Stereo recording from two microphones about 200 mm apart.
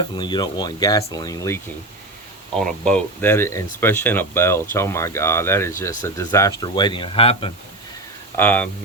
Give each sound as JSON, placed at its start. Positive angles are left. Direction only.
{"t": 0.0, "sound": "speech", "side_deg": 20}
{"t": 2.6, "sound": "speech", "side_deg": 5}
{"t": 8.4, "sound": "speech", "side_deg": 10}